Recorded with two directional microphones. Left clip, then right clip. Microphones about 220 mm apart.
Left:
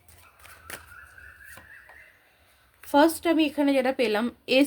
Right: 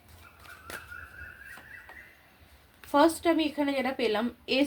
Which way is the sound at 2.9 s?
50° left (ahead or behind).